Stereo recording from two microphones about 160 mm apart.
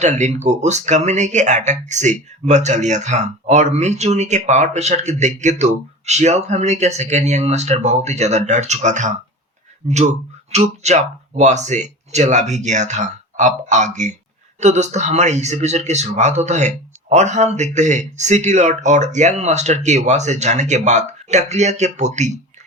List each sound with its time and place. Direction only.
0.0 s speech: 45° right (ahead or behind)